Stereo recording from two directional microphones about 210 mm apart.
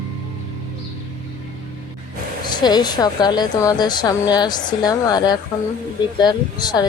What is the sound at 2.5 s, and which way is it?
Speech, 20° left (ahead or behind).